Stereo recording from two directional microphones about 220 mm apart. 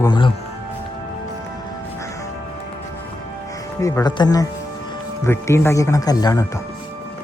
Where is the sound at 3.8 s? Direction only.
20° left (ahead or behind).